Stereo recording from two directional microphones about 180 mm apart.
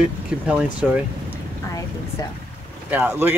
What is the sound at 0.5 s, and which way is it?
Speech, 5° right (ahead or behind).